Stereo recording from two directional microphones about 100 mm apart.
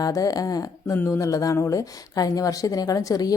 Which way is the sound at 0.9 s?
25° left (ahead or behind).